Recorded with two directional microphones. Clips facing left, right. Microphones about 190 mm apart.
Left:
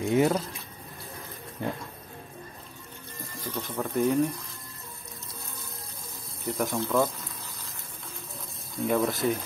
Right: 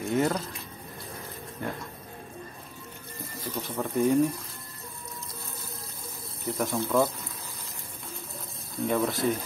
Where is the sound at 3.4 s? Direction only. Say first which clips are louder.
Even; 10° right (ahead or behind).